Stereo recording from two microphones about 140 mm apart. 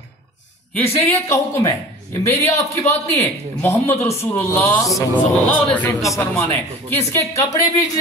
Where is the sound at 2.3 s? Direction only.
20° left (ahead or behind).